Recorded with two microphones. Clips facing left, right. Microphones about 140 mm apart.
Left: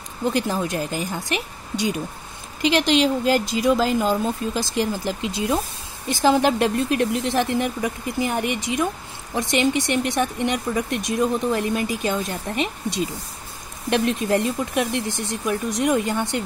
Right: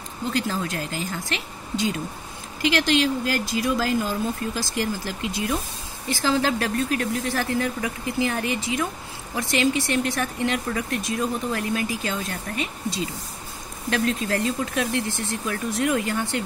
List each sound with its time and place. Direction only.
0.3 s speech: 20° left (ahead or behind)
2.6 s speech: 25° left (ahead or behind)